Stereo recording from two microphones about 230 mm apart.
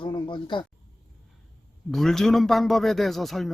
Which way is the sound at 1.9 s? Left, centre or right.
Centre.